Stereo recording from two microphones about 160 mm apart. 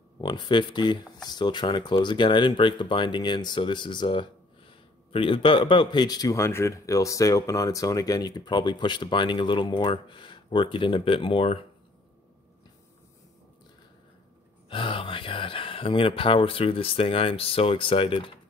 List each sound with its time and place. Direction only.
0.2 s speech: 30° left (ahead or behind)
14.7 s speech: 35° left (ahead or behind)